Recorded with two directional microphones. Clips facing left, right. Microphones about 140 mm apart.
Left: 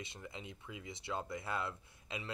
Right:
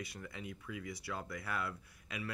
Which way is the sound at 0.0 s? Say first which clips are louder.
Right 2 dB; 20° left (ahead or behind).